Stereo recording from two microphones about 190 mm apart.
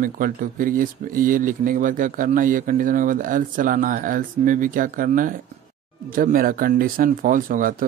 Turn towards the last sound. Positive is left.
turn(degrees=-45)  # may be behind; listen again after turning